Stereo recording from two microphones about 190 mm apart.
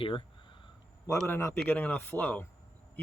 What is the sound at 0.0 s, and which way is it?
Speech, 25° left (ahead or behind).